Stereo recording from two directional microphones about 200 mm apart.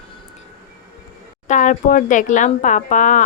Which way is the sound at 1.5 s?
40° left (ahead or behind).